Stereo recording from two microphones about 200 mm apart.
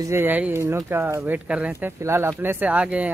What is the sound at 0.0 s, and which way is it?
Speech, 10° right (ahead or behind).